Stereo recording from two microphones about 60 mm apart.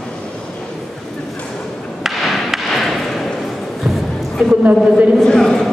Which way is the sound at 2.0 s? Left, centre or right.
Centre.